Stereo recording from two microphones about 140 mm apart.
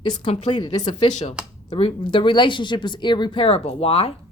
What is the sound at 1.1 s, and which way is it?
Speech, 55° left (ahead or behind).